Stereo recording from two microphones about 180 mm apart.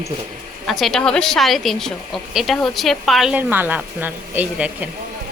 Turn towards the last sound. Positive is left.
turn(degrees=-10)  # may be behind; listen again after turning